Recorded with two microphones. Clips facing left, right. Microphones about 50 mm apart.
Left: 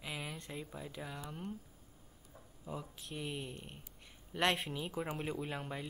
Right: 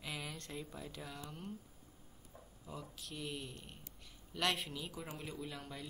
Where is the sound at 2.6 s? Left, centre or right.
Left.